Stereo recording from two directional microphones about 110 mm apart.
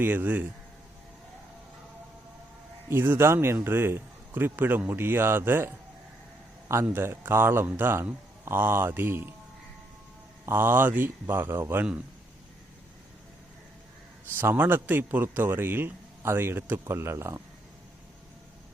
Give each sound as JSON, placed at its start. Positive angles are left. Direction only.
{"t": 0.0, "sound": "speech", "side_deg": -15}
{"t": 2.9, "sound": "a man's voice", "side_deg": -20}
{"t": 10.4, "sound": "a man's voice", "side_deg": -20}
{"t": 14.3, "sound": "a man's voice", "side_deg": -15}